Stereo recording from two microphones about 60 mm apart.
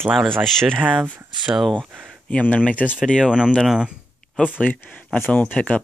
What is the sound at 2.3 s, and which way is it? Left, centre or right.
Speech, left.